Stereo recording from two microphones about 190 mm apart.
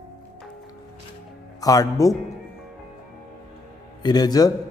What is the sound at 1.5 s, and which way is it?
Music, 20° left (ahead or behind).